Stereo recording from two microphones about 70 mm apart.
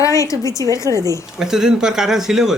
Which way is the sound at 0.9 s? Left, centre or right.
Right.